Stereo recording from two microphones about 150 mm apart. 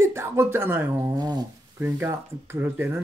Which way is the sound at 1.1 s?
25° right (ahead or behind).